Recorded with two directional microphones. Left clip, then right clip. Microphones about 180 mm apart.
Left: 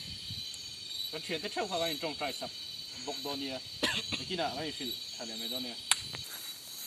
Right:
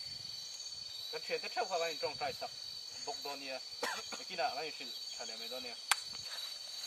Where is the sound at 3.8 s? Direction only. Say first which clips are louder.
Left 9 dB; 25° right (ahead or behind).